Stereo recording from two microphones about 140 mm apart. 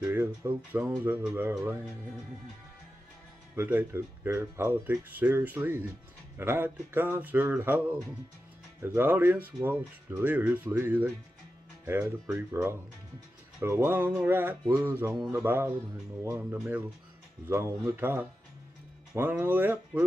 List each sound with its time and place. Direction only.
0.0 s speech: 15° right (ahead or behind)
3.5 s speech: 15° right (ahead or behind)